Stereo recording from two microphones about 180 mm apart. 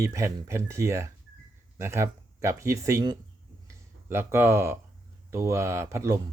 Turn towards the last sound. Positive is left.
turn(degrees=-15)  # may be behind; listen again after turning